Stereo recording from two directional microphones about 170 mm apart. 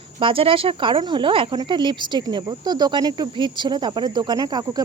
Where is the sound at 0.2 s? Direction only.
30° right (ahead or behind).